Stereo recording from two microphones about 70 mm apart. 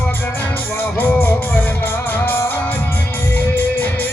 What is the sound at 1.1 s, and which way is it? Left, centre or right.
Music, left.